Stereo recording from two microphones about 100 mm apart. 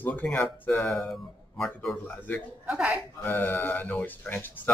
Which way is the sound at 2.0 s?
15° left (ahead or behind).